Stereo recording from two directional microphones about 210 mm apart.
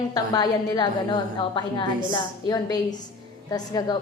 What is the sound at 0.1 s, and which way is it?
A woman's voice, 20° left (ahead or behind).